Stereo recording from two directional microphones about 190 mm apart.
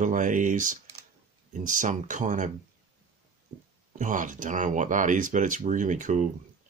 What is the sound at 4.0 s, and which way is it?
Speech, 40° right (ahead or behind).